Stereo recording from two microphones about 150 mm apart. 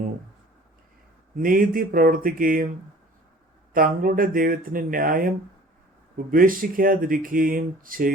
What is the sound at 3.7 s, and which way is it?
Speech, 70° right (ahead or behind).